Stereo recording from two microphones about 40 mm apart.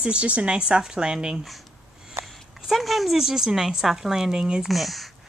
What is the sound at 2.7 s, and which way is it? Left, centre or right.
A woman's voice, centre.